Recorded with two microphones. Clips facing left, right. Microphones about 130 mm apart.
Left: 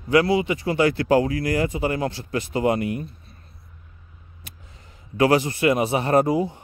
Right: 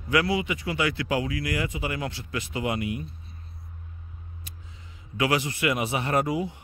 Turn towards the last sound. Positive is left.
turn(degrees=35)  # may be behind; listen again after turning